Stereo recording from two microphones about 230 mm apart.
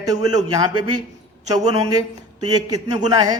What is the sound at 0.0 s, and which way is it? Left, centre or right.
Speech, centre.